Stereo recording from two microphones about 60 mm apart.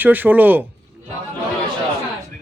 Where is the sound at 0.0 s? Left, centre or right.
Right.